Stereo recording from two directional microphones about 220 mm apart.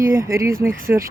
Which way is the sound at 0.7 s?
40° right (ahead or behind).